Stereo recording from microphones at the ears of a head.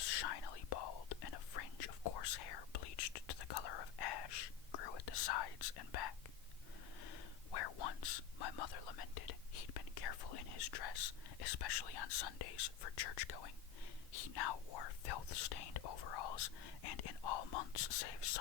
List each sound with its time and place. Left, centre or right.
0.0 s whispering: left